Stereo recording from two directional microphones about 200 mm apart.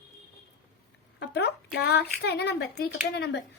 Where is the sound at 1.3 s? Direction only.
55° left (ahead or behind).